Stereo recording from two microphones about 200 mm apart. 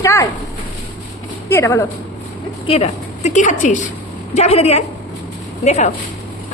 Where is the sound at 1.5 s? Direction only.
15° left (ahead or behind).